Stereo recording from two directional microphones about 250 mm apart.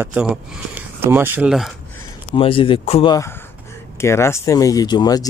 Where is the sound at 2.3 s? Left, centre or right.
Left.